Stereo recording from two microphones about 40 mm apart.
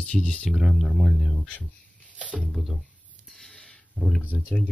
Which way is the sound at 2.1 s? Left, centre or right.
Left.